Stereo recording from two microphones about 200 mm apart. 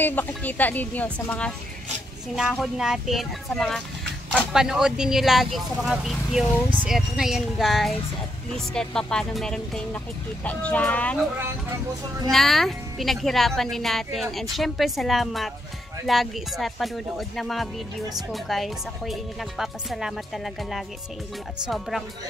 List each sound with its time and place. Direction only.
0.0 s speech: 10° left (ahead or behind)
12.3 s speech: centre (ahead or behind)